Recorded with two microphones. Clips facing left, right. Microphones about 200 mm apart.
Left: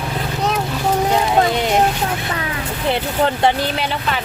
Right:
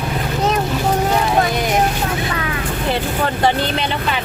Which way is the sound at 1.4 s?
25° left (ahead or behind).